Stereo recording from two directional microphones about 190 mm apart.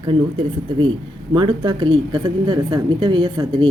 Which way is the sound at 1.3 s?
25° right (ahead or behind).